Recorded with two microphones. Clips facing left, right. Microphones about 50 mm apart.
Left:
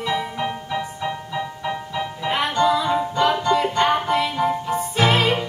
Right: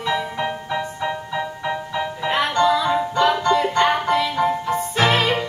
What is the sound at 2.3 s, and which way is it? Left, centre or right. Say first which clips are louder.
Music: right 1 dB; centre.